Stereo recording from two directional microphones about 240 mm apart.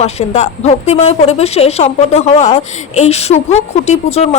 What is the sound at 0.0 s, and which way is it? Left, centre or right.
Speech, left.